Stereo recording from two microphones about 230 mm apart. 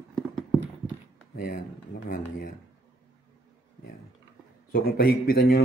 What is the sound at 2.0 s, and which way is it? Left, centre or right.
Speech, left.